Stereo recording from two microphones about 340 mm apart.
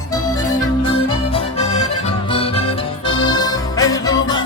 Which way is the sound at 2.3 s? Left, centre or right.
Centre.